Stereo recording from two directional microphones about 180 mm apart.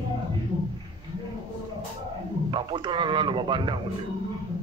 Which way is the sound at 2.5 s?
25° right (ahead or behind).